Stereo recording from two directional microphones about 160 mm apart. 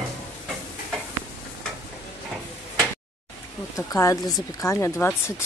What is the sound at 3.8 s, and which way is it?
Speech, 20° left (ahead or behind).